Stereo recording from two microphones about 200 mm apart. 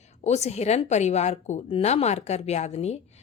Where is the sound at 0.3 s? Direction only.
35° left (ahead or behind).